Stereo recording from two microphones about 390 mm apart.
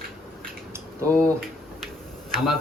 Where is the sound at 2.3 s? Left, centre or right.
Centre.